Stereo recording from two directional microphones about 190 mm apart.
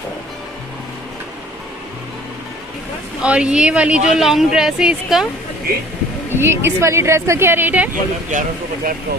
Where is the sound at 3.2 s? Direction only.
5° right (ahead or behind).